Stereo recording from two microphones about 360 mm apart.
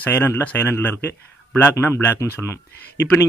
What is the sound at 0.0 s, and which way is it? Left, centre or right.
Speech, centre.